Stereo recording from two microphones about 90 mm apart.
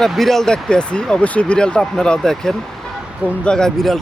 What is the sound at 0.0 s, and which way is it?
Speech, centre (ahead or behind).